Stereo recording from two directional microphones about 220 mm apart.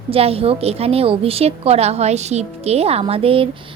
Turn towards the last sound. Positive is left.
turn(degrees=-25)  # may be behind; listen again after turning